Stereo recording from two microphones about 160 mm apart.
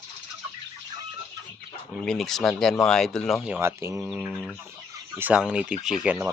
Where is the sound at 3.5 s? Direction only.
15° right (ahead or behind).